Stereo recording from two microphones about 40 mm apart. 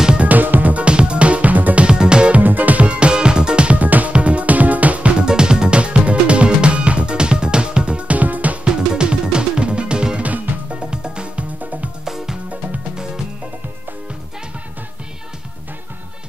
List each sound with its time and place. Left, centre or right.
0.2 s music: right
0.8 s music: right
1.9 s music: right
2.3 s music: right
2.9 s music: right
3.8 s music: right
5.2 s music: right
8.6 s music: right
10.2 s music: right
10.8 s music: right
11.6 s music: right
12.0 s music: centre